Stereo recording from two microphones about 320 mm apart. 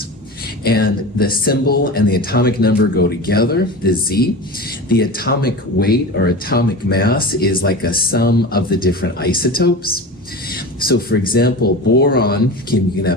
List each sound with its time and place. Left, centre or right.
0.6 s speech: left